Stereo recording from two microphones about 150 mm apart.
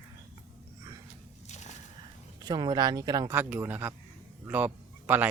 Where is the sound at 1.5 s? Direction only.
50° left (ahead or behind).